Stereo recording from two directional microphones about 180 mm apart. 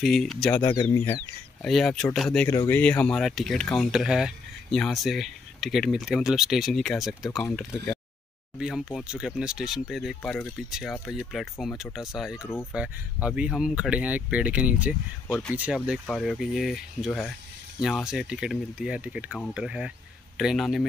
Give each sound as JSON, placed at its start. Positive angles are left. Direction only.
{"t": 0.0, "sound": "speech", "side_deg": 0}
{"t": 1.6, "sound": "speech", "side_deg": 0}
{"t": 2.5, "sound": "speech", "side_deg": 15}
{"t": 2.8, "sound": "speech", "side_deg": 5}
{"t": 15.2, "sound": "speech", "side_deg": 5}
{"t": 15.5, "sound": "speech", "side_deg": -5}